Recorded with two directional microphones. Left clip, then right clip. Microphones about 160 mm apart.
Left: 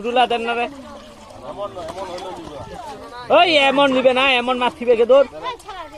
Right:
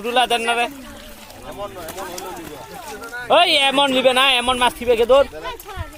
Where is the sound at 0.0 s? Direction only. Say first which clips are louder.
Even; 25° left (ahead or behind).